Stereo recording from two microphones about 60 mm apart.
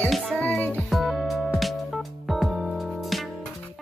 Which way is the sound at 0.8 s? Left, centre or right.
Centre.